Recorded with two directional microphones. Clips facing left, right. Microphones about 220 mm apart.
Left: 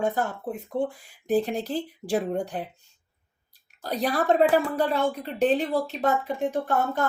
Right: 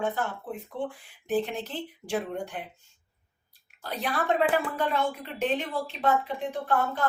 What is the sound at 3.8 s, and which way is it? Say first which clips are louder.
A woman's voice: left 5 dB; 40° left (ahead or behind).